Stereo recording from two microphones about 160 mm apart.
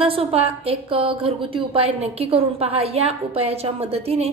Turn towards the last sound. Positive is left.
turn(degrees=-40)  # may be behind; listen again after turning